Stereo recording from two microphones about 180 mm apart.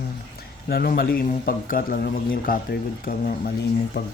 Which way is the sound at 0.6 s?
55° left (ahead or behind).